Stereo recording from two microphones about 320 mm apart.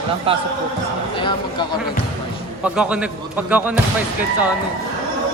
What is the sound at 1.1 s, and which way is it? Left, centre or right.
Speech, centre.